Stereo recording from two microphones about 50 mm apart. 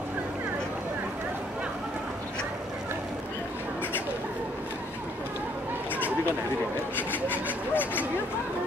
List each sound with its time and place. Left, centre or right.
7.0 s rub: left